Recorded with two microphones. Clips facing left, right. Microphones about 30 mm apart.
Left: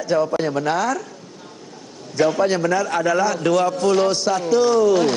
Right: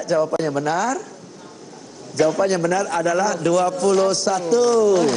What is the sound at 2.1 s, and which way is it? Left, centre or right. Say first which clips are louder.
A man's voice: even; centre.